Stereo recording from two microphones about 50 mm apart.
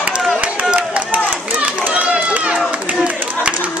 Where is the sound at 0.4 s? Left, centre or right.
Right.